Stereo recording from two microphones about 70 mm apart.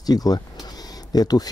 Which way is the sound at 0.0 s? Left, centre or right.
Left.